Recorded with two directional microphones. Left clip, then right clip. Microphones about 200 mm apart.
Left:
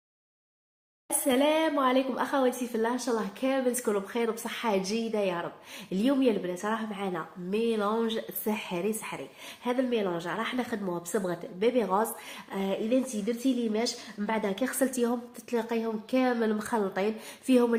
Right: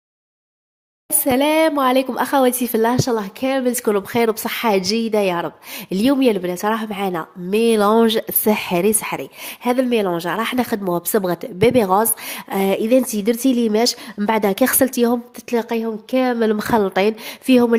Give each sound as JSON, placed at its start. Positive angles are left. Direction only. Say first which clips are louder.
{"t": 1.3, "sound": "a woman's voice", "louder": "right 10 dB", "side_deg": -55}